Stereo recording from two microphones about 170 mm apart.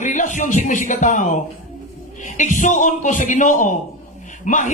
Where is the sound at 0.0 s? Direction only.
45° left (ahead or behind).